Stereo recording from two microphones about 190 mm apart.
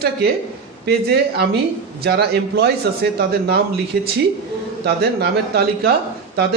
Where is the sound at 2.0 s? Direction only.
60° right (ahead or behind).